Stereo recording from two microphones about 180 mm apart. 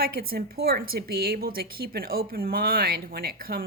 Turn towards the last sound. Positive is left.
turn(degrees=-55)  # may be behind; listen again after turning